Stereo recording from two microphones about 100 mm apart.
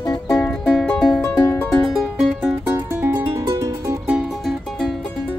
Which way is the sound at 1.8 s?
Centre (ahead or behind).